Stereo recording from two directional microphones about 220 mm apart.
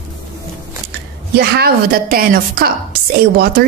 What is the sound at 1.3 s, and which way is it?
Speech, 45° right (ahead or behind).